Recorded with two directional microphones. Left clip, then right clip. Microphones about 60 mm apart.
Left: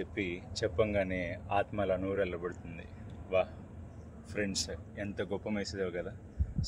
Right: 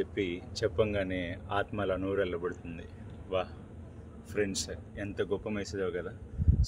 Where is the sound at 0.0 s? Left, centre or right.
Right.